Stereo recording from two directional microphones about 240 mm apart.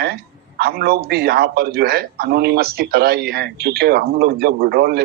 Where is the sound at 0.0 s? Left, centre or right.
Right.